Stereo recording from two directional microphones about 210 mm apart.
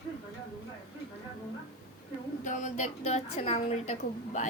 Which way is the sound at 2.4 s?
35° left (ahead or behind).